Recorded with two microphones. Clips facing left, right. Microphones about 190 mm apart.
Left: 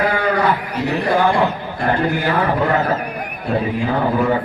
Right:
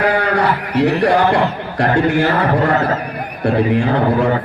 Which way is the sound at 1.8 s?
70° right (ahead or behind).